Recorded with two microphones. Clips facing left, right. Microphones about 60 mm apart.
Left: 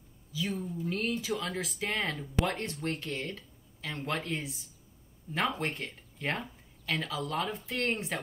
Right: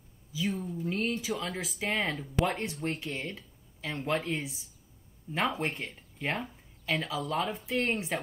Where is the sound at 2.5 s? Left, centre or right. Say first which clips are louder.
Right 1 dB; centre.